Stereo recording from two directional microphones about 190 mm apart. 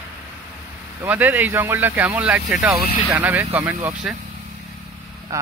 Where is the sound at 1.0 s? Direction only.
10° right (ahead or behind).